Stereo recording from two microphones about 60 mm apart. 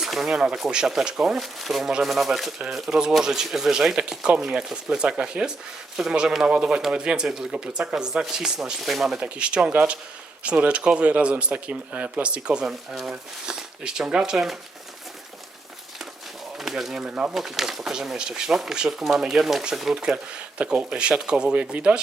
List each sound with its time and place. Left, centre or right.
0.0 s speech: centre
9.1 s speech: centre
12.6 s speech: centre
16.6 s pigeon: centre
17.0 s speech: centre
17.3 s speech: centre
20.6 s speech: centre